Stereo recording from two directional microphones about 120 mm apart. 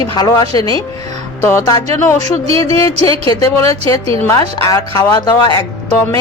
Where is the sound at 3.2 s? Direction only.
30° left (ahead or behind).